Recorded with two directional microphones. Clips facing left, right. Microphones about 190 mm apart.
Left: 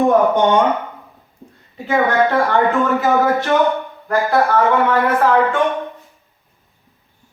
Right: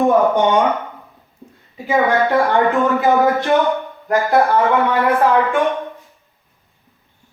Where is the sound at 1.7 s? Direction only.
15° right (ahead or behind).